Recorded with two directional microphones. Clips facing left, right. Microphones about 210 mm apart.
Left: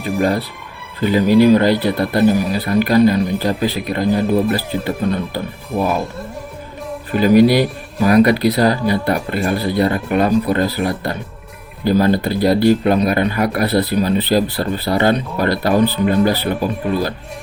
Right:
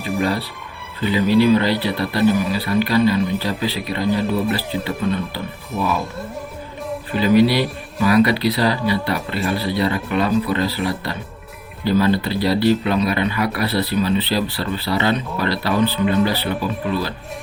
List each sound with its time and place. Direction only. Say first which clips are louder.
0.0 s speech: left 4 dB; 45° left (ahead or behind)
7.2 s speech: left 4 dB; 45° left (ahead or behind)